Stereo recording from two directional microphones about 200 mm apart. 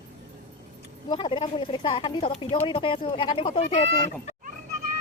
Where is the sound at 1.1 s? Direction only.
25° left (ahead or behind).